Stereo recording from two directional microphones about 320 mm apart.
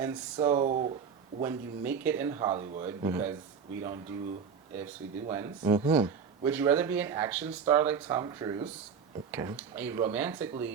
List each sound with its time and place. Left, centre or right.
0.0 s speech: centre
1.4 s speech: centre
5.3 s speech: centre